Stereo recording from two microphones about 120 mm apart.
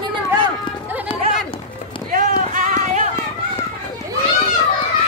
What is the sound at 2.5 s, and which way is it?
Run, 90° right.